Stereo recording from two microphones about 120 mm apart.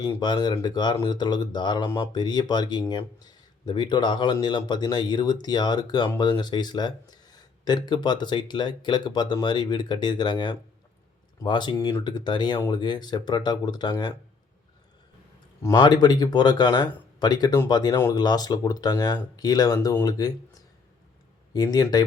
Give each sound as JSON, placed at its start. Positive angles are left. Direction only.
{"t": 0.2, "sound": "speech", "side_deg": 40}
{"t": 15.7, "sound": "speech", "side_deg": 35}